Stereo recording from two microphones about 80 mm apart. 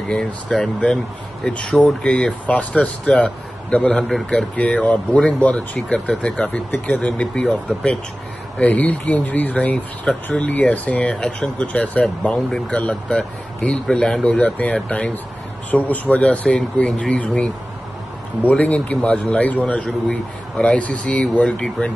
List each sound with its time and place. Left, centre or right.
0.5 s speech: centre
4.6 s speech: centre